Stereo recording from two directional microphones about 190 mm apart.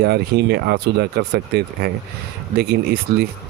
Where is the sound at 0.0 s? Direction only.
60° right (ahead or behind).